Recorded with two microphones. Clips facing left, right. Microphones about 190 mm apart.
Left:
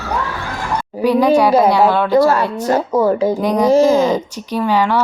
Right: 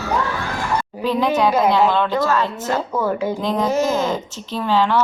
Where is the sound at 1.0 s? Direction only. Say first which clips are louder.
Left 6 dB; 10° left (ahead or behind).